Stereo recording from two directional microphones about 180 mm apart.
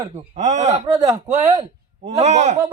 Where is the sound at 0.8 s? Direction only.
20° right (ahead or behind).